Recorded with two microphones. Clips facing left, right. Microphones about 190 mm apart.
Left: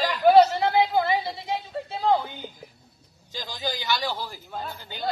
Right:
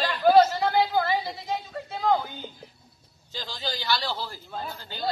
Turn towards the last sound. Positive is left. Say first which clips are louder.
# even
turn(degrees=15)  # may be behind; listen again after turning